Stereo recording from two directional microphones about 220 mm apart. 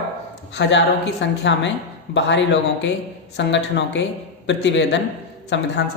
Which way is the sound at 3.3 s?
55° left (ahead or behind).